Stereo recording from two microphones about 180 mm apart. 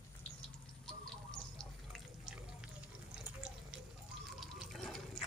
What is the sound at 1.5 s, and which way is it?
Water, centre (ahead or behind).